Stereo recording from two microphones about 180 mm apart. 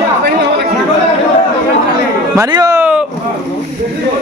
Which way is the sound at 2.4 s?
20° right (ahead or behind).